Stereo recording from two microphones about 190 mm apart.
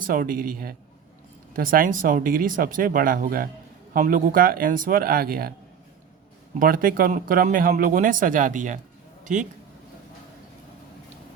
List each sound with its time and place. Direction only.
0.0 s speech: 45° right (ahead or behind)
6.6 s speech: 45° right (ahead or behind)